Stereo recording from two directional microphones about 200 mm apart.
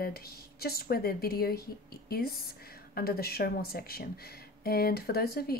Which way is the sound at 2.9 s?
50° left (ahead or behind).